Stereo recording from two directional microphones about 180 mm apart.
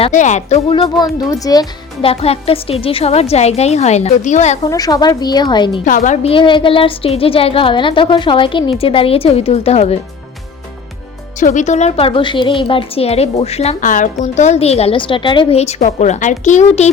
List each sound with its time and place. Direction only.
0.0 s speech: 45° left (ahead or behind)
4.6 s a woman's voice: 20° left (ahead or behind)
5.8 s speech: 45° left (ahead or behind)
11.3 s speech: 45° left (ahead or behind)